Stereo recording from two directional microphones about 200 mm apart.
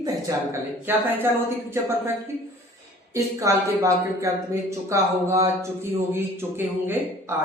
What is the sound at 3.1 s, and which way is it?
A woman's voice, 15° right (ahead or behind).